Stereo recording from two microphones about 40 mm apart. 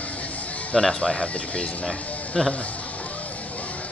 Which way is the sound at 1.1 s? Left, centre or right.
Left.